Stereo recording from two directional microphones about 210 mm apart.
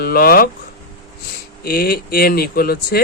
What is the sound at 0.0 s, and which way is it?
Speech, 45° left (ahead or behind).